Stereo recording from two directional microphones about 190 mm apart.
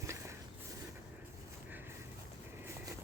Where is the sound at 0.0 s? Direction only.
15° right (ahead or behind).